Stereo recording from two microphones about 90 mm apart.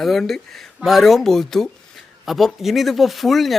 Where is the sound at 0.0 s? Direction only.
Centre (ahead or behind).